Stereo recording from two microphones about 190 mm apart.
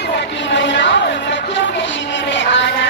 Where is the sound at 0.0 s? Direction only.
65° left (ahead or behind).